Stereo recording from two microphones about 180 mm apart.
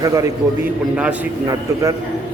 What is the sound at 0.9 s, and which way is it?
Speech, 5° right (ahead or behind).